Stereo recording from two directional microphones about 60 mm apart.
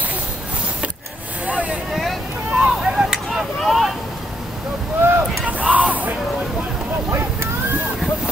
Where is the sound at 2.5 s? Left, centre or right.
Centre.